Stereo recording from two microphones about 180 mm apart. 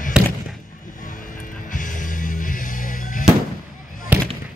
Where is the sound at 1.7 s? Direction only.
45° left (ahead or behind).